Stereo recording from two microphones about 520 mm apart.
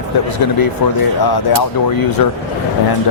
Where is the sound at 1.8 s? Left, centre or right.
Left.